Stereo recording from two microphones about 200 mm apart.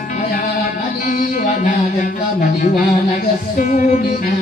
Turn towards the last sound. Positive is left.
turn(degrees=40)  # may be behind; listen again after turning